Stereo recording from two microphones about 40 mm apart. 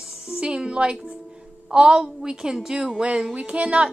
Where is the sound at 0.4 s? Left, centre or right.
Right.